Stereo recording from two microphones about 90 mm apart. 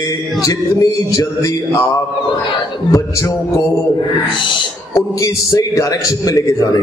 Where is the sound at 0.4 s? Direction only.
40° left (ahead or behind).